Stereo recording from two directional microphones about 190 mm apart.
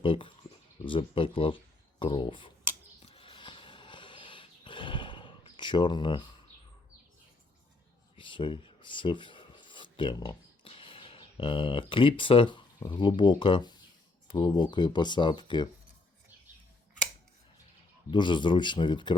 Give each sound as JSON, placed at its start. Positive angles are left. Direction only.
{"t": 0.0, "sound": "speech", "side_deg": 25}
{"t": 3.0, "sound": "a sound", "side_deg": 30}
{"t": 8.1, "sound": "speech", "side_deg": 25}
{"t": 18.1, "sound": "speech", "side_deg": 25}